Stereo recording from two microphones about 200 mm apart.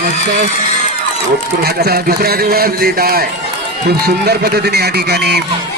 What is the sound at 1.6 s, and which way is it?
A man's voice, 50° right (ahead or behind).